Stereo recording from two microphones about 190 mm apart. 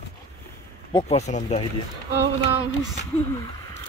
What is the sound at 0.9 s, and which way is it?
Speech, 35° left (ahead or behind).